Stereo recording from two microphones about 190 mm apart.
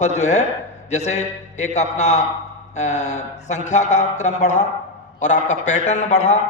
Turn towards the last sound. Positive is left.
turn(degrees=35)  # may be behind; listen again after turning